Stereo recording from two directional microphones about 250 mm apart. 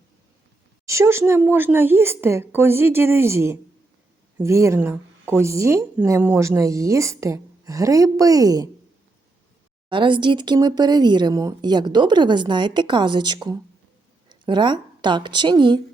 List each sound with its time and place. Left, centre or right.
0.9 s speech: centre
9.9 s a woman's voice: centre